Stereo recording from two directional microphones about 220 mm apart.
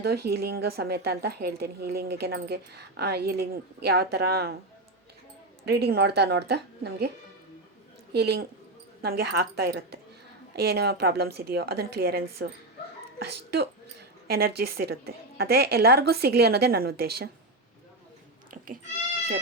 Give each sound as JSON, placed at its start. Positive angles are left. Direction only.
{"t": 0.0, "sound": "speech", "side_deg": -45}
{"t": 5.6, "sound": "speech", "side_deg": -50}
{"t": 8.1, "sound": "speech", "side_deg": -50}
{"t": 18.5, "sound": "a sound", "side_deg": -40}